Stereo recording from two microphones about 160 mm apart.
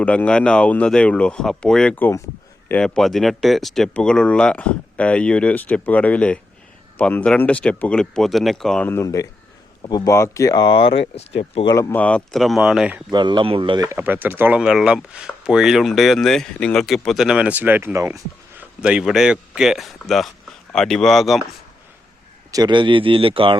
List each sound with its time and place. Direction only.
0.0 s speech: 10° left (ahead or behind); by 11.7 s 35° left (ahead or behind)
11.7 s speech: 15° left (ahead or behind); by 13.0 s 5° right (ahead or behind)
13.1 s speech: 30° right (ahead or behind)
13.8 s speech: 15° right (ahead or behind)
18.8 s speech: 5° right (ahead or behind)
22.5 s speech: 30° right (ahead or behind)